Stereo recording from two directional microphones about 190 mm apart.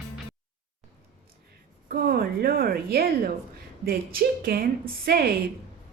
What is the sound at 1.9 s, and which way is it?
A woman's voice, 50° right (ahead or behind).